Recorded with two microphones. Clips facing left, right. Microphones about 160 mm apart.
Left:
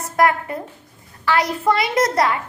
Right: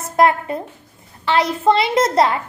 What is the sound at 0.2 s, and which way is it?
A woman's voice, 25° right (ahead or behind).